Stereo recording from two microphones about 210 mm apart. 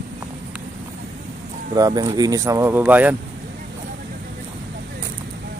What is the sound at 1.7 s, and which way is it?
Speech, 20° right (ahead or behind).